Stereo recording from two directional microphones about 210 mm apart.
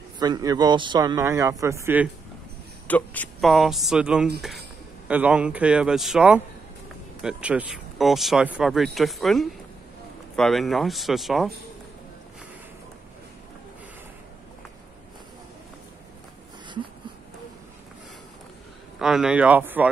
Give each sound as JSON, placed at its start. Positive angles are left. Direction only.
{"t": 0.2, "sound": "a man's voice", "side_deg": -20}
{"t": 2.9, "sound": "speech", "side_deg": 5}
{"t": 18.9, "sound": "speech", "side_deg": 0}